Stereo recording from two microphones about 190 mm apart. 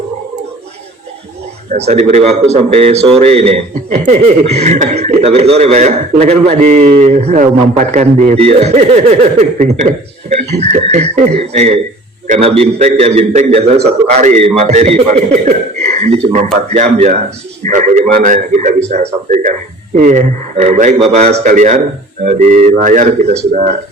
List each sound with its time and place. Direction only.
1.7 s speech: 35° right (ahead or behind)